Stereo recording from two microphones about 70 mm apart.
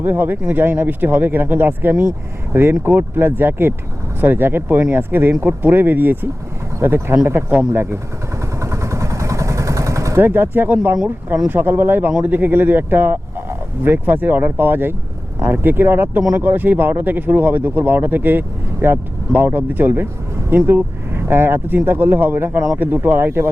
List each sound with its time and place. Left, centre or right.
0.0 s speech: right
8.6 s vehicle: right
10.2 s speech: right